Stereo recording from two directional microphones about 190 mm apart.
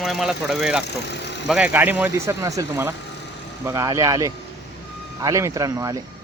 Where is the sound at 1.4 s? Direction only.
5° right (ahead or behind).